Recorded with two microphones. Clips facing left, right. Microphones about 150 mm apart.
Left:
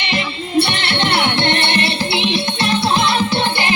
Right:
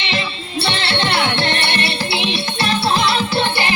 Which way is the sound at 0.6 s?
20° left (ahead or behind).